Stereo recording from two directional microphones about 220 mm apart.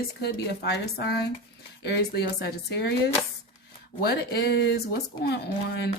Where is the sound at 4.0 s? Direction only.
45° left (ahead or behind).